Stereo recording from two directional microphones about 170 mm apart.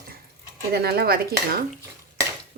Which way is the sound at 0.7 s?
65° right (ahead or behind).